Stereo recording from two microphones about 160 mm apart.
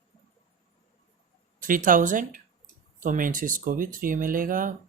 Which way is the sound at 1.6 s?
60° right (ahead or behind).